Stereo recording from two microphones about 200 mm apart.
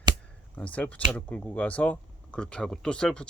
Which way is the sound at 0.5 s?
5° left (ahead or behind).